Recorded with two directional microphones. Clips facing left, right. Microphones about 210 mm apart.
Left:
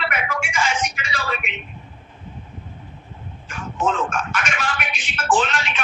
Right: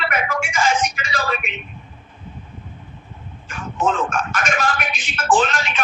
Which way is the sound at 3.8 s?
45° right (ahead or behind).